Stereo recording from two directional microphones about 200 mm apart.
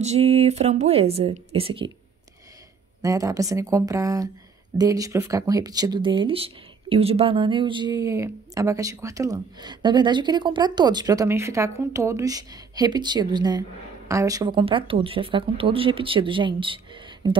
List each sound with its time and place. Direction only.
0.0 s speech: 30° right (ahead or behind)
3.0 s a woman's voice: 15° right (ahead or behind)